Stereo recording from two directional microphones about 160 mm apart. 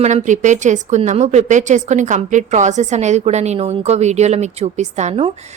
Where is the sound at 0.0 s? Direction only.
50° right (ahead or behind).